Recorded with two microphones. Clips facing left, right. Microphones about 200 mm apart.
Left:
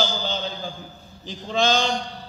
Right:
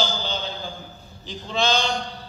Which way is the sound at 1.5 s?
45° left (ahead or behind).